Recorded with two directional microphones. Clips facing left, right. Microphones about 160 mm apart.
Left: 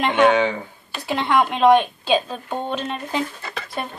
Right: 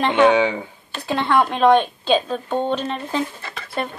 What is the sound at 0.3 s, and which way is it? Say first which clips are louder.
Speech: right 1 dB; 15° right (ahead or behind).